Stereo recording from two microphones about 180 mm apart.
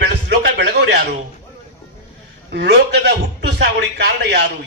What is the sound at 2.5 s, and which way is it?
A man's voice, 70° right (ahead or behind).